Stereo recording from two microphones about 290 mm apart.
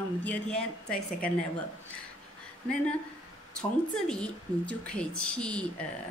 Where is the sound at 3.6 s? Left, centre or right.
Centre.